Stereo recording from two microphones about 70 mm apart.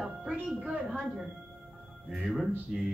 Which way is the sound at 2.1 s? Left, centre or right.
Centre.